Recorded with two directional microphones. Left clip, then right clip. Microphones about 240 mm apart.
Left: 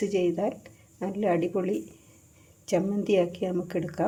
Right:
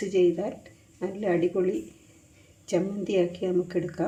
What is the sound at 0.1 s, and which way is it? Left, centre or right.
Speech, left.